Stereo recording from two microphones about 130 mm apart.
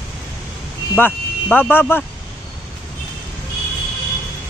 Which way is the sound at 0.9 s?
15° left (ahead or behind).